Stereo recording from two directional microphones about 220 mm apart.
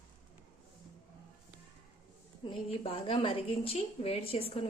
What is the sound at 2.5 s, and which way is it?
A woman's voice, 25° left (ahead or behind).